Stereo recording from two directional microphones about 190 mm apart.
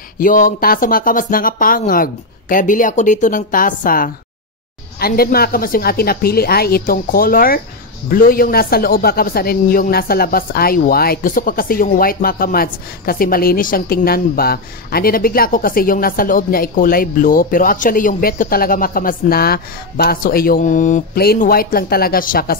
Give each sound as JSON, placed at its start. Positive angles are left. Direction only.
{"t": 0.2, "sound": "a man's voice", "side_deg": 45}